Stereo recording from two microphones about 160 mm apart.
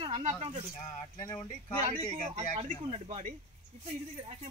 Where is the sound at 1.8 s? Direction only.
40° right (ahead or behind).